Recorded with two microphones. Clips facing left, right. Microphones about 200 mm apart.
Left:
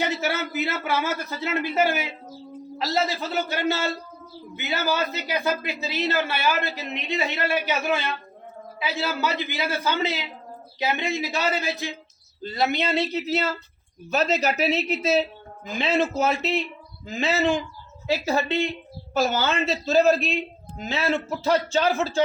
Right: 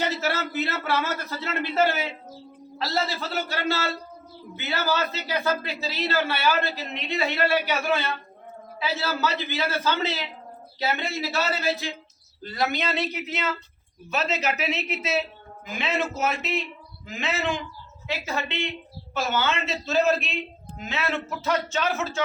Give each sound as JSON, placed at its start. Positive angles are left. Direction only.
{"t": 0.0, "sound": "a man's voice", "side_deg": 15}